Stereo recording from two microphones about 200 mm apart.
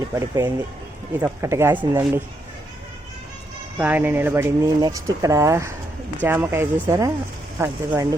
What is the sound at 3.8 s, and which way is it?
Speech, 10° right (ahead or behind).